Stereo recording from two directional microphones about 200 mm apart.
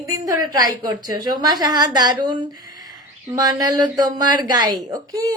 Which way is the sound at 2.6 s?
20° right (ahead or behind).